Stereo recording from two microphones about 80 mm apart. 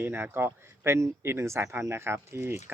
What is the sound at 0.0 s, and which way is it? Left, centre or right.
Speech, right.